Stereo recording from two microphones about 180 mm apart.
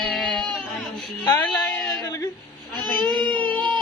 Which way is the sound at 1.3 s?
20° left (ahead or behind).